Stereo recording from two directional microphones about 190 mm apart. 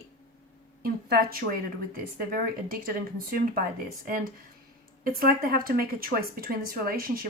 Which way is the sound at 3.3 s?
50° right (ahead or behind).